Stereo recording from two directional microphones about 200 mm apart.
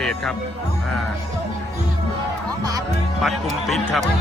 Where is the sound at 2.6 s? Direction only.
20° right (ahead or behind).